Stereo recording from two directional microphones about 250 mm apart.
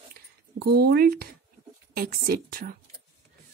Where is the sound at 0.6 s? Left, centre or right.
Right.